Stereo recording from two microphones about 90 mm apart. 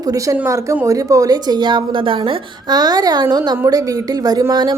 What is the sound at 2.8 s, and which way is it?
A woman's voice, 50° right (ahead or behind).